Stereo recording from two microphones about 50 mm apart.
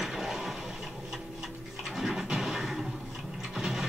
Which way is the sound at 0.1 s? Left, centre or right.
Centre.